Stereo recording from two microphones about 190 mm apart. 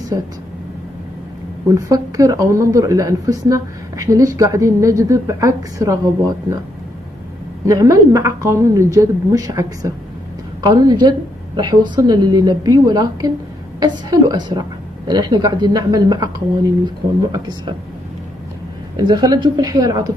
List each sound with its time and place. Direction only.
1.8 s speech: 15° right (ahead or behind)
7.6 s a woman's voice: 15° right (ahead or behind)
17.3 s a woman's voice: 20° right (ahead or behind)
18.9 s a woman's voice: 20° right (ahead or behind)